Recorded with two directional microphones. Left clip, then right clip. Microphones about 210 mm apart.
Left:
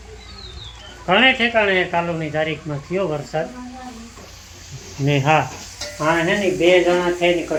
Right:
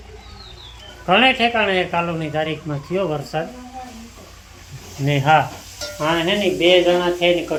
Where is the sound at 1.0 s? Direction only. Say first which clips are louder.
Even; 5° right (ahead or behind).